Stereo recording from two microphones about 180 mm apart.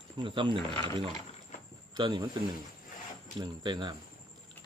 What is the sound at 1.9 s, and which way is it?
Speech, 25° right (ahead or behind).